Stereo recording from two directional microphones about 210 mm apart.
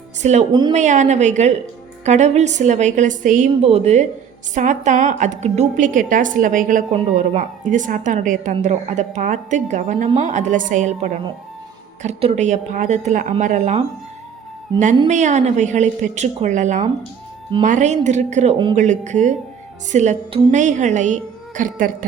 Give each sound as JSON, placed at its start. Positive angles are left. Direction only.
{"t": 0.2, "sound": "a woman's voice", "side_deg": -35}
{"t": 14.9, "sound": "a woman's voice", "side_deg": -35}
{"t": 18.5, "sound": "speech", "side_deg": -20}
{"t": 18.8, "sound": "a woman's voice", "side_deg": -35}